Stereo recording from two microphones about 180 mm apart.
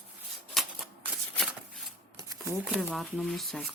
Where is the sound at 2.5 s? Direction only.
5° right (ahead or behind).